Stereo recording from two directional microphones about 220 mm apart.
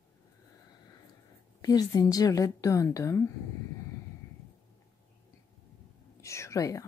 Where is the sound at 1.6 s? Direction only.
15° left (ahead or behind).